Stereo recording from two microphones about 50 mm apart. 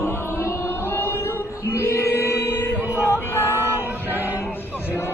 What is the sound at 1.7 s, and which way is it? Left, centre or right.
Choir, left.